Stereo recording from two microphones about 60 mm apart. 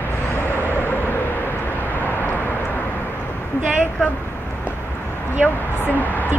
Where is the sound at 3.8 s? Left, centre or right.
Left.